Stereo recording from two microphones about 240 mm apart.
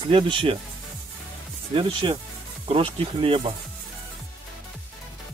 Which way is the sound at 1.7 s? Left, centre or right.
Right.